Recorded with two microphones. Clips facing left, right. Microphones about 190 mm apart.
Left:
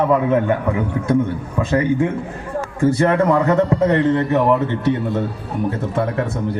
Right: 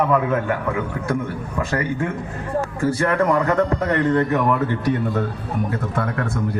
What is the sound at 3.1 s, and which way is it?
A man's voice, 25° left (ahead or behind).